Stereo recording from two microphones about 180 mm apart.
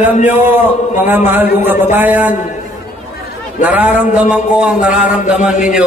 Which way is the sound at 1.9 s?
10° right (ahead or behind).